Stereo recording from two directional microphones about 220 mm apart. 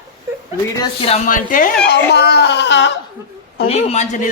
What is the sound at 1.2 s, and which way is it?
Speech, 40° left (ahead or behind).